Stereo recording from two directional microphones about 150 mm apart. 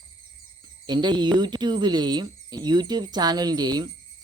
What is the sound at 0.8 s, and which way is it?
Speech, 30° right (ahead or behind).